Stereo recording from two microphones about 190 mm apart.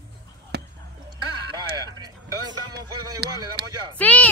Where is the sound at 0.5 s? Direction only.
60° right (ahead or behind).